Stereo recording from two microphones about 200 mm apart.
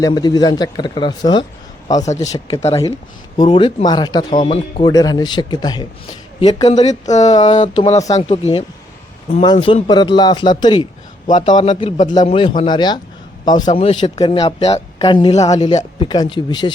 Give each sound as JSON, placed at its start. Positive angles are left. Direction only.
{"t": 0.0, "sound": "speech", "side_deg": 20}
{"t": 2.0, "sound": "speech", "side_deg": 35}